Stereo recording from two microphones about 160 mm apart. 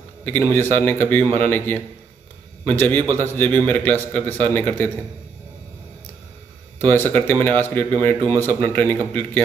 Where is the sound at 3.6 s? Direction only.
10° left (ahead or behind).